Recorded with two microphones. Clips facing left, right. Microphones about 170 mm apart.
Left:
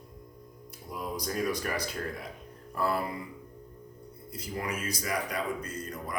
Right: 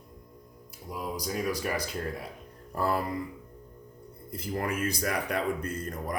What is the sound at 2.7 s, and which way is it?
Music, 40° right (ahead or behind).